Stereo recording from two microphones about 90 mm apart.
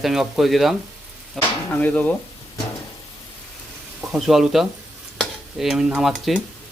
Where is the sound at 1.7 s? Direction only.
20° left (ahead or behind).